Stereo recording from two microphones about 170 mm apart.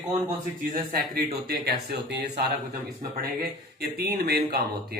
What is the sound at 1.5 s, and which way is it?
Speech, 65° right (ahead or behind).